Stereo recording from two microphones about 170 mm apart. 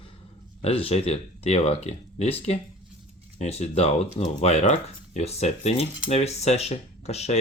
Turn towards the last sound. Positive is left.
turn(degrees=40)  # may be behind; listen again after turning